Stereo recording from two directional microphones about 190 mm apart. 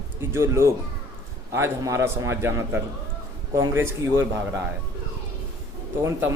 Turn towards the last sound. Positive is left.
turn(degrees=-15)  # may be behind; listen again after turning